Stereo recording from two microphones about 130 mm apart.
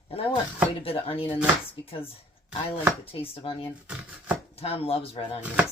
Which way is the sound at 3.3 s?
45° left (ahead or behind).